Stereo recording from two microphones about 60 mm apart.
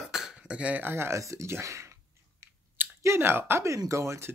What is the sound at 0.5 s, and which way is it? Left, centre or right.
Speech, right.